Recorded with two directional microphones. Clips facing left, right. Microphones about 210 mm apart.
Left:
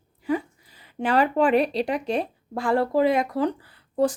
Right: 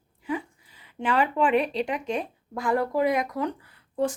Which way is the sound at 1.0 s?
40° left (ahead or behind).